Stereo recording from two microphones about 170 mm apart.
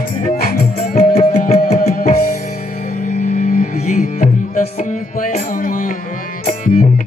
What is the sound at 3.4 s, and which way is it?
Music, 50° left (ahead or behind).